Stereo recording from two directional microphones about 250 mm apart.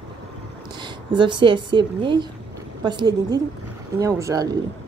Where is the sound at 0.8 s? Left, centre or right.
Centre.